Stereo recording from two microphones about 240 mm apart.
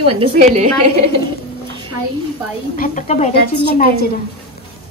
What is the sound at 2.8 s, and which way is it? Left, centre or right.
Speech, left.